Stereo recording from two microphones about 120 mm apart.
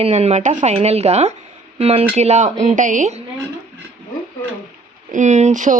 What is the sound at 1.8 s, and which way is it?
Speech, 55° right (ahead or behind).